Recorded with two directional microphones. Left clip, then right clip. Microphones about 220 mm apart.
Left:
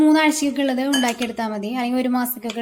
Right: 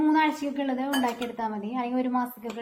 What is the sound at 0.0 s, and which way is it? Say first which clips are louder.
A woman's voice: left 7 dB; 55° left (ahead or behind).